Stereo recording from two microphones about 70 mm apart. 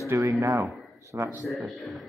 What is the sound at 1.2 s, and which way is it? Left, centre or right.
Speech, right.